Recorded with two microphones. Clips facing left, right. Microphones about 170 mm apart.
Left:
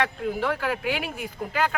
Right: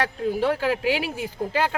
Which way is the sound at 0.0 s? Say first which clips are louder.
Right 3 dB; 35° right (ahead or behind).